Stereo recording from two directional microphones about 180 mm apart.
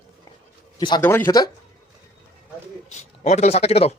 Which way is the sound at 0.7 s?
25° left (ahead or behind).